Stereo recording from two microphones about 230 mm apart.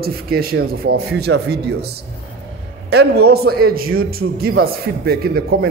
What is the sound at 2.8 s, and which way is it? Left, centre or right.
A man's voice, right.